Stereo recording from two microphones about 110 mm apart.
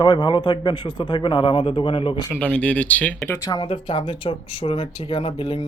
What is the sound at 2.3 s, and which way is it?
Speech, 10° left (ahead or behind).